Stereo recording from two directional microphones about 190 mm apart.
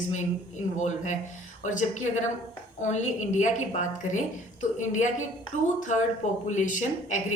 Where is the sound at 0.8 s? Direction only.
40° left (ahead or behind).